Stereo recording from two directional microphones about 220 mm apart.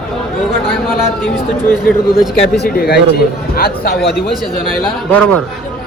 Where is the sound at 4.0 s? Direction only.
Centre (ahead or behind).